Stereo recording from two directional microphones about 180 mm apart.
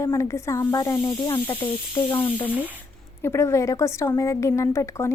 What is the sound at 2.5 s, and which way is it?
Speech, 10° right (ahead or behind).